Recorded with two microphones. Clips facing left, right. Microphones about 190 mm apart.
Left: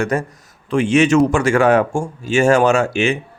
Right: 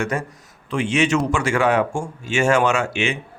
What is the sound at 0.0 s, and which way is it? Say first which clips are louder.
Speech: left 5 dB; 40° left (ahead or behind).